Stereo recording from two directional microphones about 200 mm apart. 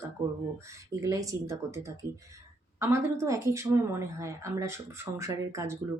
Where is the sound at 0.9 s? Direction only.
15° right (ahead or behind).